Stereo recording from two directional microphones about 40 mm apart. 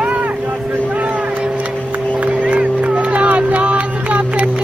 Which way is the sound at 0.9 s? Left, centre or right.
Right.